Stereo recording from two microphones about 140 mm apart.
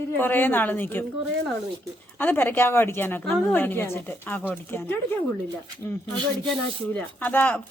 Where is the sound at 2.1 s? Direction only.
15° left (ahead or behind).